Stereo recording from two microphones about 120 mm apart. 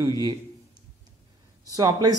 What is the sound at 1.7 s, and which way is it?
Speech, 30° right (ahead or behind).